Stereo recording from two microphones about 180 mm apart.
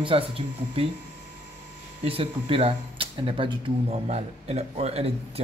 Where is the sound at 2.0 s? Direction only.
30° right (ahead or behind).